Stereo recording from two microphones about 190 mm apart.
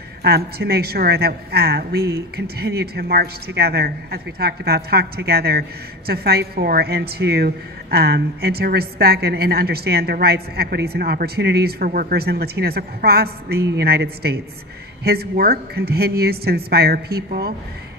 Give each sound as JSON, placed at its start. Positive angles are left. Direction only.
{"t": 0.2, "sound": "a woman's voice", "side_deg": -55}